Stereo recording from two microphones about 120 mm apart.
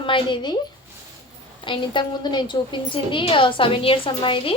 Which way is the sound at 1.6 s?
45° left (ahead or behind).